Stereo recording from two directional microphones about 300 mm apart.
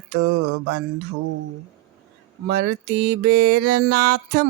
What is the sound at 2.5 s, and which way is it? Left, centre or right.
Mantra, right.